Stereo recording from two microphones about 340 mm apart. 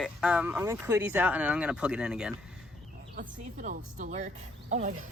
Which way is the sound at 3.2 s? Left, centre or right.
Right.